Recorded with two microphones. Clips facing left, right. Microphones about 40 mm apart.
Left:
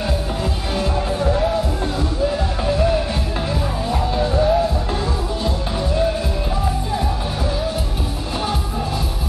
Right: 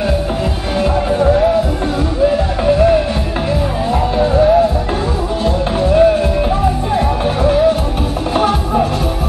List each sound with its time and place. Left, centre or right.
0.7 s music: right
7.4 s music: right